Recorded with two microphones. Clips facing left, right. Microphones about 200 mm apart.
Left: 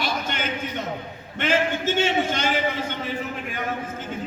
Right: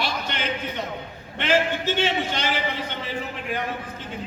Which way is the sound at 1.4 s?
45° left (ahead or behind).